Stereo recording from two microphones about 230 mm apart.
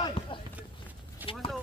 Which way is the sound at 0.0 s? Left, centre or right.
Left.